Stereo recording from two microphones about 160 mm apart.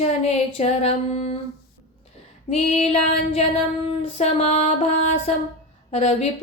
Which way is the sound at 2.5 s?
40° left (ahead or behind).